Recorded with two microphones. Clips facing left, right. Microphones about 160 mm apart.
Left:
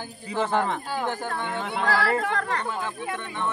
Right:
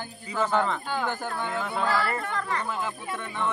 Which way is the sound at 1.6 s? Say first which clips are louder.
Left 4 dB; 80° left.